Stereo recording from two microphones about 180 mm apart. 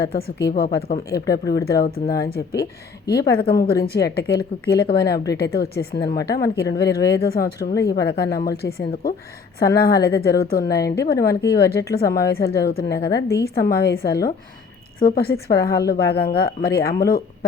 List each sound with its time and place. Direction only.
0.0 s a woman's voice: 60° left (ahead or behind)